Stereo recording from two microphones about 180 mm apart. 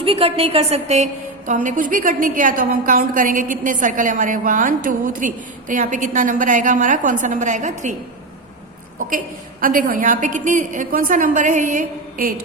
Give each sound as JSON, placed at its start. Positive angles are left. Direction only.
{"t": 0.0, "sound": "a woman's voice", "side_deg": -30}
{"t": 9.0, "sound": "a woman's voice", "side_deg": -50}